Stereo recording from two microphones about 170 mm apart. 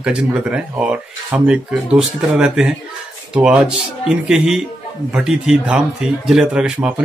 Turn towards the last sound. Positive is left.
turn(degrees=-5)  # may be behind; listen again after turning